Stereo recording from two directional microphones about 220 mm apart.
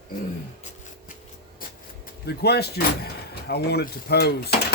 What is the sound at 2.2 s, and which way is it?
Speech, 45° left (ahead or behind).